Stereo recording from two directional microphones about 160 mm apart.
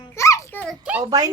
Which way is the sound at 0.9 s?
10° right (ahead or behind).